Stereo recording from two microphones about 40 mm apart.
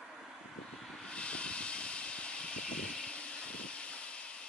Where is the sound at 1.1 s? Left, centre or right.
Left.